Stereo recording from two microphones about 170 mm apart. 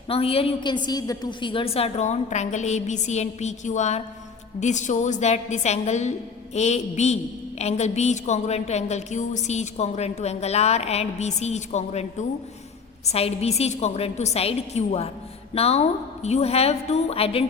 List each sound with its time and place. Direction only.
0.1 s a woman's voice: 35° left (ahead or behind)